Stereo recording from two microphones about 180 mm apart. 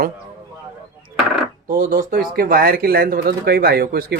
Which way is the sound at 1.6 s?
50° right (ahead or behind).